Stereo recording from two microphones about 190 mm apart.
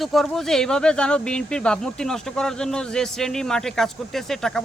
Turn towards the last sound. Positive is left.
turn(degrees=0)  # may be behind; listen again after turning